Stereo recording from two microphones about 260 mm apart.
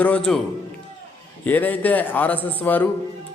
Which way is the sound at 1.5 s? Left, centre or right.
Centre.